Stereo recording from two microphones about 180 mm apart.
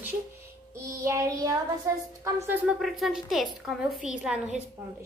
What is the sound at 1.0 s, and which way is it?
Speech, 15° right (ahead or behind).